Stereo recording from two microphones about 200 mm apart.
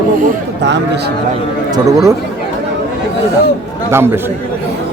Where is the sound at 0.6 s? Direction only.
60° right (ahead or behind).